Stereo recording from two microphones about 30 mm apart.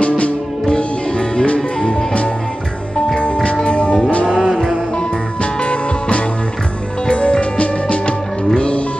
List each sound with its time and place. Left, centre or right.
0.7 s music: left
1.8 s music: left
3.6 s music: left